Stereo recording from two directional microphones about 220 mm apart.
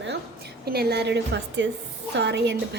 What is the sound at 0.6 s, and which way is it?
A woman's voice, 45° right (ahead or behind).